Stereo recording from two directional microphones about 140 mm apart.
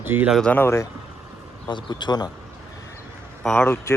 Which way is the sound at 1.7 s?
35° left (ahead or behind).